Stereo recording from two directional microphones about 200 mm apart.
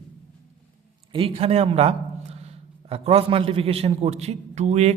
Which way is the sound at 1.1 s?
25° right (ahead or behind).